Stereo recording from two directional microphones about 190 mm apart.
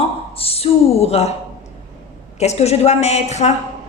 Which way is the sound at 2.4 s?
35° left (ahead or behind).